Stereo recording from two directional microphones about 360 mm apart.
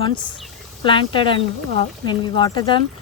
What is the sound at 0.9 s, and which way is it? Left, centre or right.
Speech, centre.